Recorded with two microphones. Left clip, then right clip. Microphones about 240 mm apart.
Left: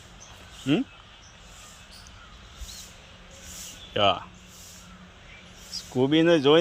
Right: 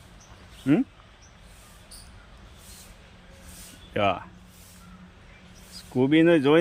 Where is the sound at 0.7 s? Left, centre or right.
Centre.